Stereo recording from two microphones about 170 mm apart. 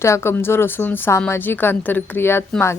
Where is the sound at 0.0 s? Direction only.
15° left (ahead or behind).